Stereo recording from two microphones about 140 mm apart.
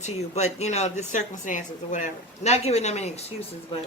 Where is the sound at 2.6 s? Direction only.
50° left (ahead or behind).